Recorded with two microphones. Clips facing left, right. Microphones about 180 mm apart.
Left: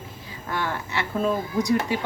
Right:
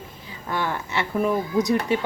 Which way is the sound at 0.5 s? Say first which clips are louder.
Right 2 dB; 20° right (ahead or behind).